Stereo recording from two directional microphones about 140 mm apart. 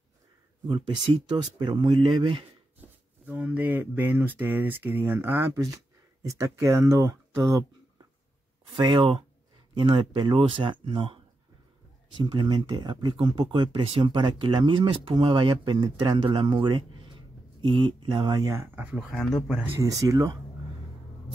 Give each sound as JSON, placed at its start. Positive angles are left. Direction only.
{"t": 1.3, "sound": "speech", "side_deg": -35}
{"t": 2.8, "sound": "speech", "side_deg": -10}
{"t": 8.7, "sound": "speech", "side_deg": -35}
{"t": 12.2, "sound": "speech", "side_deg": -35}
{"t": 18.5, "sound": "speech", "side_deg": -15}
{"t": 19.1, "sound": "speech", "side_deg": 0}
{"t": 19.8, "sound": "speech", "side_deg": -25}